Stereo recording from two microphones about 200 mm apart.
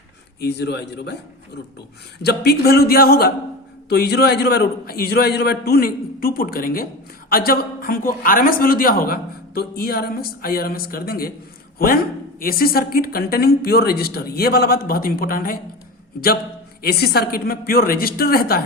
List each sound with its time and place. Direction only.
0.3 s a man's voice: 55° left (ahead or behind)
2.2 s a man's voice: 50° left (ahead or behind)
16.8 s a man's voice: 50° left (ahead or behind)